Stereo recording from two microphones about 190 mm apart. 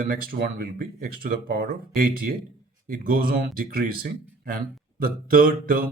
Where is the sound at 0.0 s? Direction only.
50° right (ahead or behind).